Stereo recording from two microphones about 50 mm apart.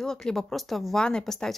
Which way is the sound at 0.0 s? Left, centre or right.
Centre.